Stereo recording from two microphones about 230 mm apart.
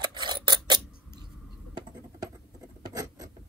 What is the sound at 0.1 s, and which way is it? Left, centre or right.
Scissors, centre.